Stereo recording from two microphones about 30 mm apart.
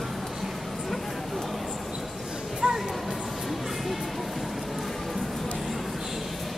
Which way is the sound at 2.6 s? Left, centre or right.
Right.